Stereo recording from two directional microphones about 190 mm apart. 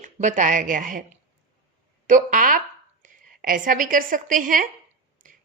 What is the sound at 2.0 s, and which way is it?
A woman's voice, 45° right (ahead or behind).